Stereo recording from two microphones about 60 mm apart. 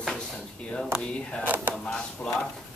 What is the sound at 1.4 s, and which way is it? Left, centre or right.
Speech, right.